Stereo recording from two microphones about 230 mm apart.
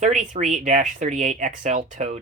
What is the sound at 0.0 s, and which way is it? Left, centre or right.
Speech, right.